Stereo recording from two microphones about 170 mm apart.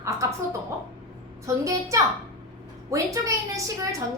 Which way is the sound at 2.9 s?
20° right (ahead or behind).